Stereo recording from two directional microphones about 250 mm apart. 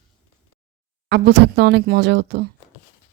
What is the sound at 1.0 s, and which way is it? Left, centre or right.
Speech, right.